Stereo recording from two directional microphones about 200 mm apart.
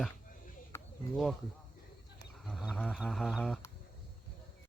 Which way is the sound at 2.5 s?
Centre (ahead or behind).